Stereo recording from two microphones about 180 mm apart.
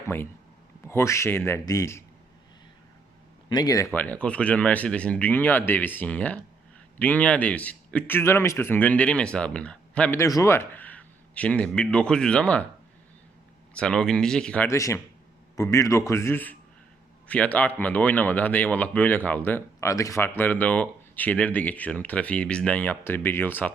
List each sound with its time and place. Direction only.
0.9 s speech: 15° left (ahead or behind)
3.5 s speech: 20° left (ahead or behind)
13.7 s speech: 5° left (ahead or behind)